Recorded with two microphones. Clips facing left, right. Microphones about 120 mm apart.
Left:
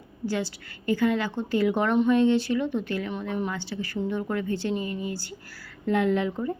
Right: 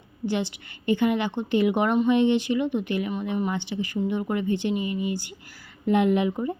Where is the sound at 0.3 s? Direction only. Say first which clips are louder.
Right 2 dB; 20° right (ahead or behind).